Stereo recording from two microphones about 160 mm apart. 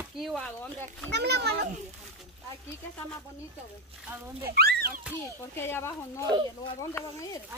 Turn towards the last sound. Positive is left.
turn(degrees=20)  # may be behind; listen again after turning